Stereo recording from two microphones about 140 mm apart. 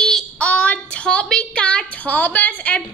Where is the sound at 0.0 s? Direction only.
5° left (ahead or behind).